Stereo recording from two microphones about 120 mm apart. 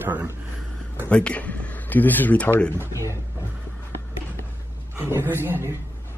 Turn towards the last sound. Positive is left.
turn(degrees=-20)  # may be behind; listen again after turning